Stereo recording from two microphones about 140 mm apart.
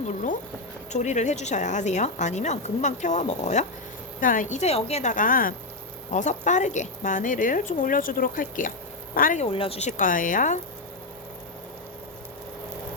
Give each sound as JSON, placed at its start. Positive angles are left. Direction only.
{"t": 0.9, "sound": "speech", "side_deg": 60}
{"t": 4.2, "sound": "speech", "side_deg": 75}
{"t": 5.1, "sound": "a woman's voice", "side_deg": 80}
{"t": 6.1, "sound": "a woman's voice", "side_deg": 60}
{"t": 9.1, "sound": "speech", "side_deg": 90}
{"t": 9.4, "sound": "speech", "side_deg": 40}
{"t": 10.0, "sound": "a woman's voice", "side_deg": 70}